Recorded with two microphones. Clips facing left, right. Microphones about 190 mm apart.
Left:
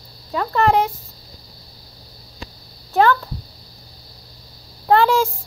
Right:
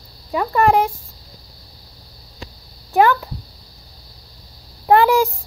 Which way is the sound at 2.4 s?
15° right (ahead or behind).